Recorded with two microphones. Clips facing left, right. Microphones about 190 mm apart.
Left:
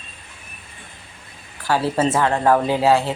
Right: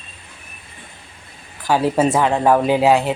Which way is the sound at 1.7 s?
15° right (ahead or behind).